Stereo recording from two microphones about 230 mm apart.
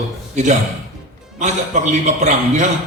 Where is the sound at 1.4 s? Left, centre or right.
Right.